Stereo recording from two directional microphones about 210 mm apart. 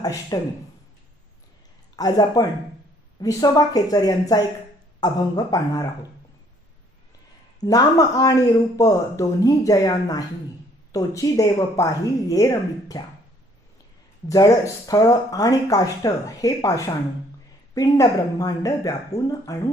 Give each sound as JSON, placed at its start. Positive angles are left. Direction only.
{"t": 0.0, "sound": "speech", "side_deg": 15}
{"t": 2.0, "sound": "speech", "side_deg": 20}
{"t": 7.6, "sound": "speech", "side_deg": 15}
{"t": 14.3, "sound": "speech", "side_deg": 15}